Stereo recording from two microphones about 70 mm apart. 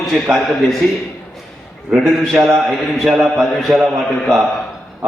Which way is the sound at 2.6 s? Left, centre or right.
Centre.